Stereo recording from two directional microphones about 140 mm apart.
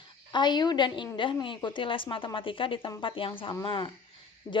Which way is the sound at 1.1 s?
35° left (ahead or behind).